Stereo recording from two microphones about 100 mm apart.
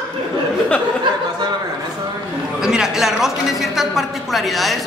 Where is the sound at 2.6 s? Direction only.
5° right (ahead or behind).